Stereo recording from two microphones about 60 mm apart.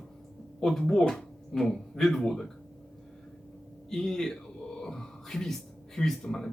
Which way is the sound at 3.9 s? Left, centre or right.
Centre.